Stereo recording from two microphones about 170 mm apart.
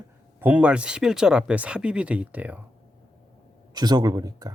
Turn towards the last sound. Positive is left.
turn(degrees=-20)  # may be behind; listen again after turning